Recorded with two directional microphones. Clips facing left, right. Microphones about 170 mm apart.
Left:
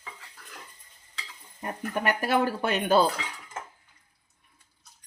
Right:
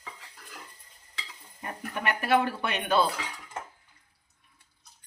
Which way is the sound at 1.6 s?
40° left (ahead or behind).